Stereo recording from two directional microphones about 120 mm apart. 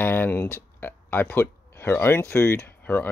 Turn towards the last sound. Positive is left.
turn(degrees=20)  # may be behind; listen again after turning